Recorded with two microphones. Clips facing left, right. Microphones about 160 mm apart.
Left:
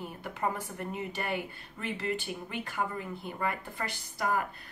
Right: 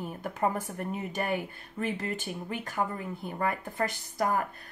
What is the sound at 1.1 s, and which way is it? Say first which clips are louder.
Speech: right 3 dB; 45° right (ahead or behind).